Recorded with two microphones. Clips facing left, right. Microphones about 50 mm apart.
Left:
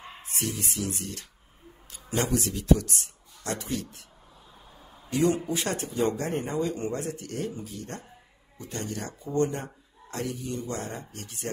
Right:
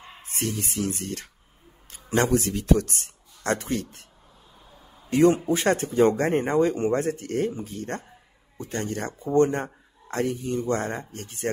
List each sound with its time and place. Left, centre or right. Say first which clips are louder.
0.2 s a man's voice: right 3 dB; right
4.7 s a sound: even; centre
5.1 s speech: right 6 dB; right